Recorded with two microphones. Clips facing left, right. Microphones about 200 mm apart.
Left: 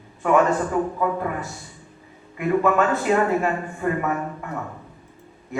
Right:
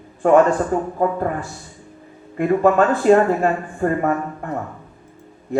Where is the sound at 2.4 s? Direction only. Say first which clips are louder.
Right 4 dB; 35° right (ahead or behind).